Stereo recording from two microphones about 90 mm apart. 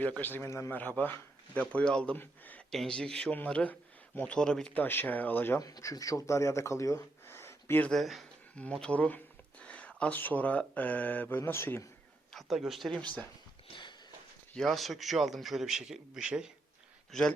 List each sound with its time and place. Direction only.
0.0 s a man's voice: 20° left (ahead or behind)
0.7 s speech: 20° left (ahead or behind)
5.5 s speech: 40° left (ahead or behind)
7.9 s a man's voice: centre (ahead or behind)
8.5 s speech: 10° left (ahead or behind); by 11.9 s 30° left (ahead or behind)
12.3 s a man's voice: centre (ahead or behind)
14.5 s a man's voice: 5° left (ahead or behind)
17.1 s speech: 5° left (ahead or behind)